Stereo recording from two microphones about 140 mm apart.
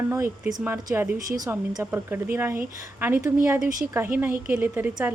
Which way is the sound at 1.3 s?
25° right (ahead or behind).